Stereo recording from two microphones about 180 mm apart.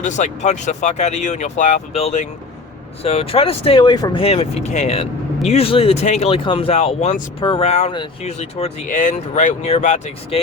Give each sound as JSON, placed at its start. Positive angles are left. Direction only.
{"t": 0.0, "sound": "speech", "side_deg": 40}